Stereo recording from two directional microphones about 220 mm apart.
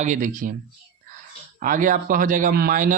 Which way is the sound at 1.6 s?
40° right (ahead or behind).